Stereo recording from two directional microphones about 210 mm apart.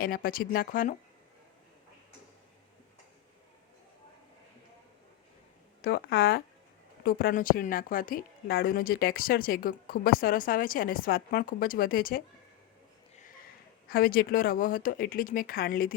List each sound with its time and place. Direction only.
0.0 s a woman's voice: 45° left (ahead or behind)
5.8 s a woman's voice: 45° left (ahead or behind)
13.8 s a woman's voice: 45° left (ahead or behind)